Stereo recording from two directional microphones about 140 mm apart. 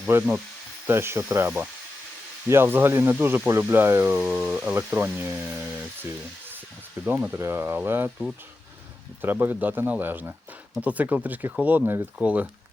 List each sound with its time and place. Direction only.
0.1 s speech: 15° right (ahead or behind)
9.2 s speech: 15° right (ahead or behind)